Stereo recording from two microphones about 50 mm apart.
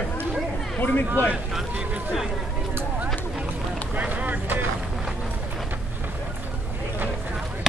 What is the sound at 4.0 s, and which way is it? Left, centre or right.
Vehicle, right.